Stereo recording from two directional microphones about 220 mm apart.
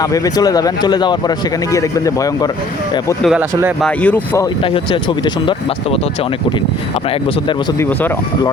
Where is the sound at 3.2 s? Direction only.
5° right (ahead or behind).